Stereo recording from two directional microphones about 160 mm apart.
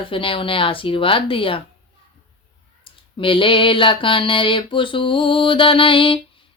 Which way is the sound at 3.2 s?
35° left (ahead or behind).